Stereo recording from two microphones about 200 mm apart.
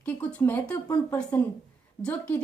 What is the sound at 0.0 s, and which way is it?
A woman's voice, 5° left (ahead or behind).